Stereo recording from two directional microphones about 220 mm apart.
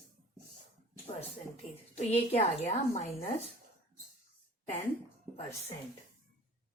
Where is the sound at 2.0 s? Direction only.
30° left (ahead or behind).